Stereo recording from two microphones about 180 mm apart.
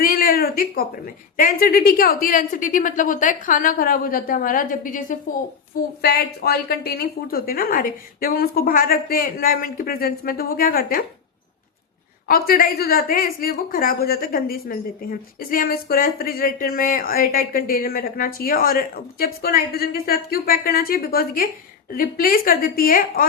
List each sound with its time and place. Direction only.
0.0 s a woman's voice: 50° left (ahead or behind)
12.3 s a woman's voice: 50° left (ahead or behind)